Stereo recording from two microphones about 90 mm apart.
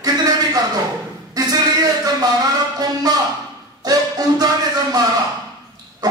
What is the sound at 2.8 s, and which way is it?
Speech, 45° right (ahead or behind).